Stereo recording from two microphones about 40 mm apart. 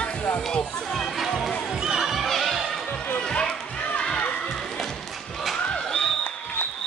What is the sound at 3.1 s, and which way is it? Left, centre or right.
Music, left.